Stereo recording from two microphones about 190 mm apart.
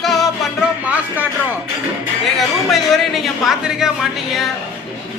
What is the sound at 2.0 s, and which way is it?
Speech, centre (ahead or behind).